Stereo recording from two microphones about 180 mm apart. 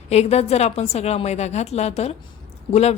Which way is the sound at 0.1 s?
35° left (ahead or behind).